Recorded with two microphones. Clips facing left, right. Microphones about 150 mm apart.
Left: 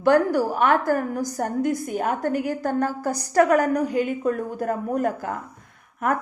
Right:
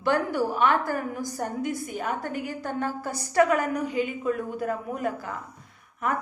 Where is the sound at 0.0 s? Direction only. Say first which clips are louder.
Left 6 dB; 45° left (ahead or behind).